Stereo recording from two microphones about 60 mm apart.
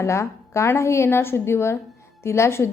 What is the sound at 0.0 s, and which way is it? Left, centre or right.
A woman's voice, left.